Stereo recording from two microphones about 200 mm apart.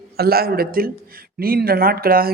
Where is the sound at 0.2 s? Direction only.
50° right (ahead or behind).